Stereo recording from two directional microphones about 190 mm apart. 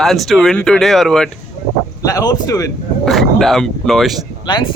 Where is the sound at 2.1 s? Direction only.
20° left (ahead or behind).